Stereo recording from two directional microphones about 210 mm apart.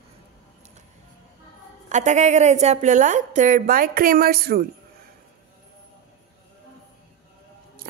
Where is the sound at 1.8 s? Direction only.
35° right (ahead or behind).